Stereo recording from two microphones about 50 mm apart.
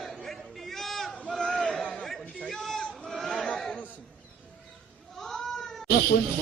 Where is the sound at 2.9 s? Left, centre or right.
Centre.